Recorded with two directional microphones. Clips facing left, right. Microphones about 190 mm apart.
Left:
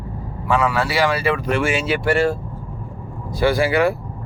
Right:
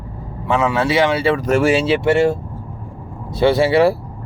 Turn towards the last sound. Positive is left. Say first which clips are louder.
# right 4 dB
turn(degrees=-30)  # may be behind; listen again after turning